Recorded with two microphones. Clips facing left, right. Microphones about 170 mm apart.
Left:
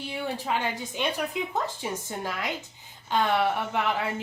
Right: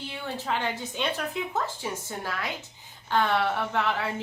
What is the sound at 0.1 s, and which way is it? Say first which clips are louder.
A woman's voice: left 2 dB; 15° left (ahead or behind).